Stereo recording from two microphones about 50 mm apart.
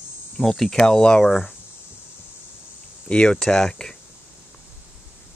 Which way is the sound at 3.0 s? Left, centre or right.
Centre.